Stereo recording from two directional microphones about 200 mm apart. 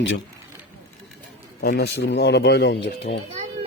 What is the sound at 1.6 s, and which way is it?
Speech, 50° left (ahead or behind).